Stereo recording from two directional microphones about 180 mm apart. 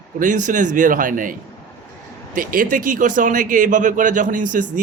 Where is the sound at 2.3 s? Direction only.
50° right (ahead or behind).